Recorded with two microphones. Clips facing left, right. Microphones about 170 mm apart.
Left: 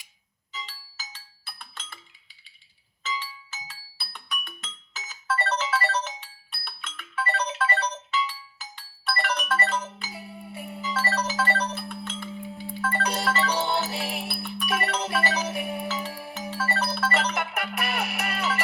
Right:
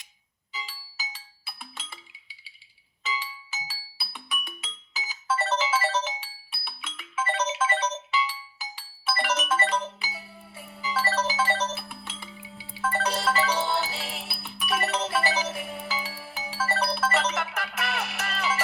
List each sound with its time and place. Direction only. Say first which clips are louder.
0.5 s music: right 1 dB; 5° right (ahead or behind)
3.0 s music: even; 5° right (ahead or behind)
10.5 s music: left 8 dB; 20° left (ahead or behind)
10.8 s music: right 1 dB; centre (ahead or behind)
13.9 s music: left 5 dB; 15° left (ahead or behind)
14.3 s music: left 2 dB; 5° right (ahead or behind)
15.5 s music: left 5 dB; 20° left (ahead or behind)
15.9 s music: left 3 dB; centre (ahead or behind)